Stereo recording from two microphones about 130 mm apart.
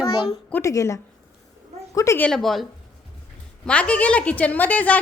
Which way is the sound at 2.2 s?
5° left (ahead or behind).